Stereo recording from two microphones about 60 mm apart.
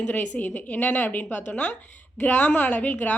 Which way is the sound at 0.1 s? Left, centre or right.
Left.